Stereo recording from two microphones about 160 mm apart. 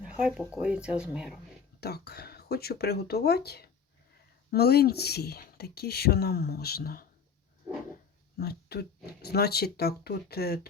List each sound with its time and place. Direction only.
0.2 s speech: 5° right (ahead or behind)
1.8 s speech: 90° left; by 7.0 s 75° left (ahead or behind)
8.4 s speech: 85° left